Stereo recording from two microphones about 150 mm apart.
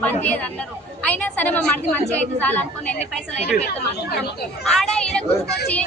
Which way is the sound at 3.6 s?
90° left.